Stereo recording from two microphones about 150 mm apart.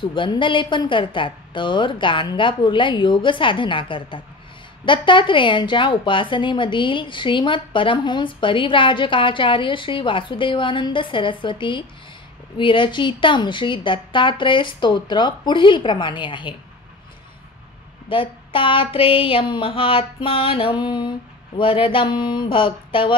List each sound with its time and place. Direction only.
0.0 s a woman's voice: 35° left (ahead or behind)
18.1 s a woman's voice: 35° left (ahead or behind)